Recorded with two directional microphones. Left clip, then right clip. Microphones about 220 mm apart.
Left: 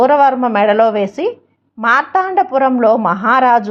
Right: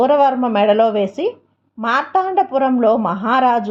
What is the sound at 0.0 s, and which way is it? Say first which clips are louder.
A woman's voice: left 3 dB; 15° left (ahead or behind).